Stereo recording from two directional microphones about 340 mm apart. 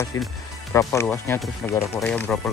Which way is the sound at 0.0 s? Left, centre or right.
Centre.